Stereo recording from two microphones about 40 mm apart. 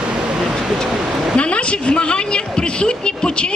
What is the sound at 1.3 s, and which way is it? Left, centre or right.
A woman's voice, left.